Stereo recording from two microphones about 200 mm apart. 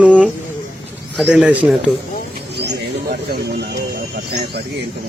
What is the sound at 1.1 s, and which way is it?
Speech, centre (ahead or behind).